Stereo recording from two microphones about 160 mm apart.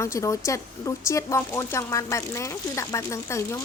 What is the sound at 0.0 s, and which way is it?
Speech, 20° left (ahead or behind).